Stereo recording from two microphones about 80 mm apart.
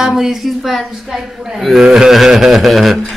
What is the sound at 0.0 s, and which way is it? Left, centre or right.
A man's voice, centre.